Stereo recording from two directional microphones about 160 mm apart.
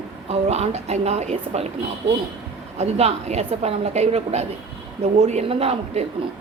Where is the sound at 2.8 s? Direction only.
40° right (ahead or behind).